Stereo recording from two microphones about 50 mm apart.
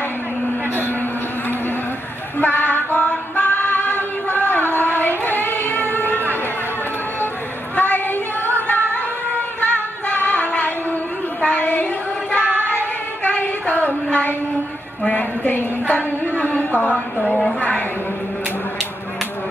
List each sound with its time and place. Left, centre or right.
2.3 s female singing: left
7.7 s female singing: left
9.6 s music: left
11.4 s child singing: left
12.6 s singing: left
15.0 s a sound: left